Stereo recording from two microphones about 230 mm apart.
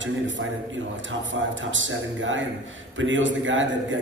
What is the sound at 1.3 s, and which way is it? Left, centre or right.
A man's voice, right.